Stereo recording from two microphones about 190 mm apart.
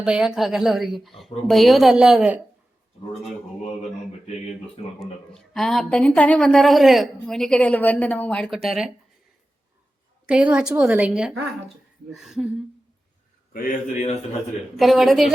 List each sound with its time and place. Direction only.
0.0 s a woman's voice: 5° right (ahead or behind)
4.9 s a woman's voice: centre (ahead or behind)
10.2 s a woman's voice: 5° right (ahead or behind)
13.5 s a man's voice: 50° left (ahead or behind)
14.8 s a woman's voice: centre (ahead or behind)